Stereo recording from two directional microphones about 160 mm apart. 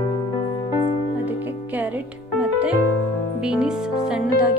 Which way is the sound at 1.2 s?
10° right (ahead or behind).